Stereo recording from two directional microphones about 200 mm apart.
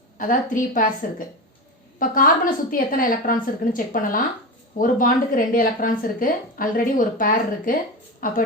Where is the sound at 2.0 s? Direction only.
45° left (ahead or behind).